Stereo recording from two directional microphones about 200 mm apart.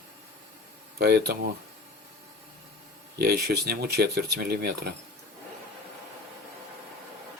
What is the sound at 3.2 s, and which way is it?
A man's voice, 50° right (ahead or behind).